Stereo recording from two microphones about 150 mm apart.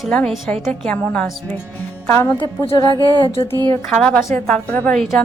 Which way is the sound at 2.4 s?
35° left (ahead or behind).